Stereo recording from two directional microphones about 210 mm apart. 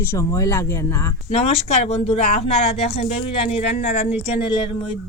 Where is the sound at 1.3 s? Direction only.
30° left (ahead or behind).